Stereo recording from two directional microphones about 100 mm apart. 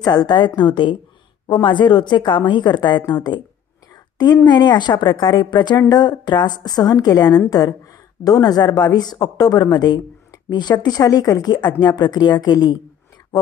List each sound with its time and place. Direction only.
0.0 s speech: 45° left (ahead or behind)
4.5 s a woman's voice: 45° left (ahead or behind)